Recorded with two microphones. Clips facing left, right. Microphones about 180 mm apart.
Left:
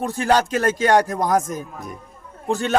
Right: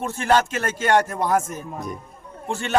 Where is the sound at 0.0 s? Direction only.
40° left (ahead or behind).